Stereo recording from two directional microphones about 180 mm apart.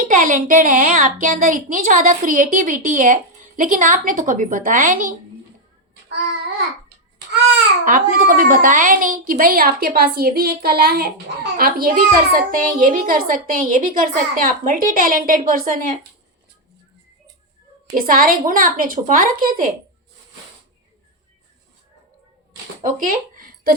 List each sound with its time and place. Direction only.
0.1 s a woman's voice: 45° right (ahead or behind)
7.9 s a woman's voice: 50° right (ahead or behind)
18.0 s a woman's voice: 55° right (ahead or behind)
22.8 s a sound: 50° right (ahead or behind)